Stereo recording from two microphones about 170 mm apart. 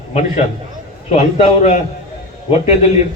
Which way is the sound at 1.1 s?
40° left (ahead or behind).